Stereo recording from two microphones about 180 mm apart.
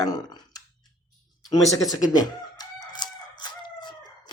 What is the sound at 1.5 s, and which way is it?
Crowing, 20° left (ahead or behind).